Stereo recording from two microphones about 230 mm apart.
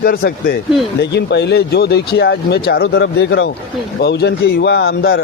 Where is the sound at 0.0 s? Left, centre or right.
Left.